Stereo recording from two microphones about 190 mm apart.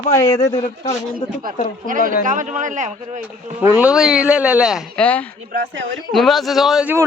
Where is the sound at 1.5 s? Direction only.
50° right (ahead or behind).